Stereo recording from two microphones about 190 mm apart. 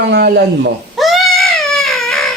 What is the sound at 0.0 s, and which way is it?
Speech, 60° right (ahead or behind).